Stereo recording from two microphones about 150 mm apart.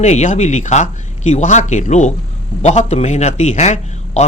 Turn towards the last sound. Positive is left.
turn(degrees=50)  # may be behind; listen again after turning